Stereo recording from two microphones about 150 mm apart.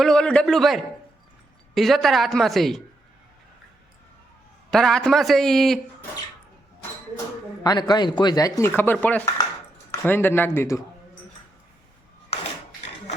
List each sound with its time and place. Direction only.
0.0 s a woman's voice: 5° left (ahead or behind)
4.7 s a woman's voice: 5° left (ahead or behind)
7.6 s a man's voice: 25° left (ahead or behind)
12.3 s a sound: 40° left (ahead or behind)